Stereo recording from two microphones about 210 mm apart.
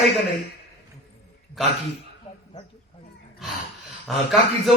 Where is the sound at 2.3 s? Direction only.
25° left (ahead or behind).